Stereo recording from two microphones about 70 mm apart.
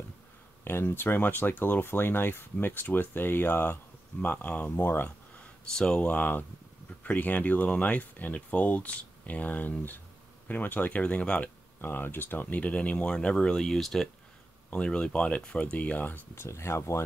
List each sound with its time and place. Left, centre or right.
0.7 s speech: left
5.7 s speech: centre
6.0 s speech: left
11.8 s speech: left; by 14.0 s centre
14.7 s speech: centre
16.3 s speech: left